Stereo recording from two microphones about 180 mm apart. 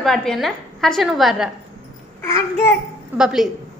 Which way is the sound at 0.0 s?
Centre (ahead or behind).